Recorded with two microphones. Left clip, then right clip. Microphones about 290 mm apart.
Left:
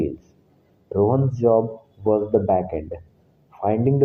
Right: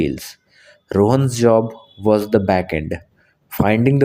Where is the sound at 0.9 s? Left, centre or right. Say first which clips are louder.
Right 4 dB; right.